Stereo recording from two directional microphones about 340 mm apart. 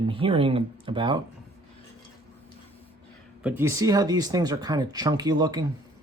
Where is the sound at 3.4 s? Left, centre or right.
Centre.